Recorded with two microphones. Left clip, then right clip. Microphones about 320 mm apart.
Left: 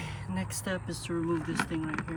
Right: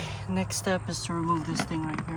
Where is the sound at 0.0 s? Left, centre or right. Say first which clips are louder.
Right 5 dB; right.